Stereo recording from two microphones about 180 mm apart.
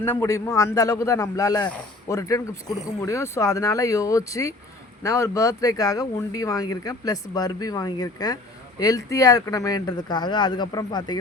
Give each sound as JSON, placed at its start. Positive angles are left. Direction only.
{"t": 0.0, "sound": "speech", "side_deg": 15}